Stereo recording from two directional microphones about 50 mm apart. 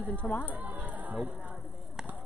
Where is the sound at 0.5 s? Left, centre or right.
Right.